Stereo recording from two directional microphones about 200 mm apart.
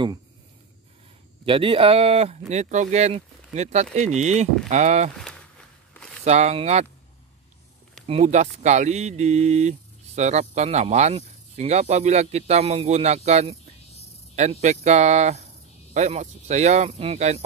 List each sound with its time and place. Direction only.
1.4 s speech: 25° right (ahead or behind)
5.9 s a sound: 5° left (ahead or behind)
6.2 s speech: 35° right (ahead or behind)
8.1 s speech: 35° right (ahead or behind)